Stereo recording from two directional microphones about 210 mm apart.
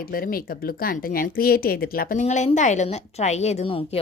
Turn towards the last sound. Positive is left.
turn(degrees=25)  # may be behind; listen again after turning